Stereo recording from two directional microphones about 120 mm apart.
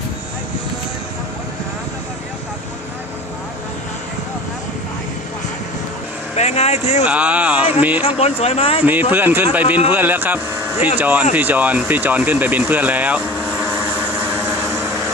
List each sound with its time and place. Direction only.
6.3 s speech: 65° left (ahead or behind)
7.1 s speech: 10° right (ahead or behind)
8.0 s speech: 55° left (ahead or behind)
8.8 s speech: 15° right (ahead or behind)
11.9 s vehicle: 15° right (ahead or behind)